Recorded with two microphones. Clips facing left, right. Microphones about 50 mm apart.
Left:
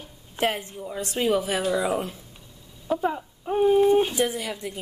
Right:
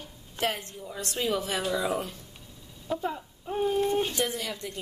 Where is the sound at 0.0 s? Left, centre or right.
Centre.